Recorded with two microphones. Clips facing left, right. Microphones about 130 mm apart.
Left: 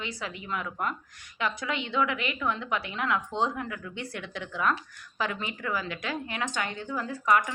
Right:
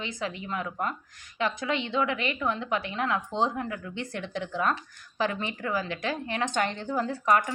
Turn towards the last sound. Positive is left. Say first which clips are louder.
# right 1 dB
turn(degrees=-35)  # may be behind; listen again after turning